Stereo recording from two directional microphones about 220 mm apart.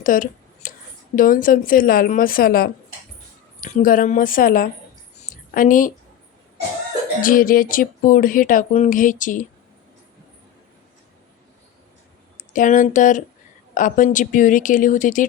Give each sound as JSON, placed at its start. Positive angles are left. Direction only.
{"t": 0.0, "sound": "a sound", "side_deg": 40}
{"t": 1.1, "sound": "speech", "side_deg": 40}
{"t": 7.2, "sound": "speech", "side_deg": 40}
{"t": 12.4, "sound": "speech", "side_deg": 35}